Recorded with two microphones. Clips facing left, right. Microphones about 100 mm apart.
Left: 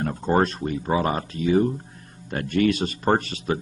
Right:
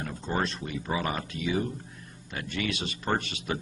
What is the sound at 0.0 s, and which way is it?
A man's voice, 50° left (ahead or behind).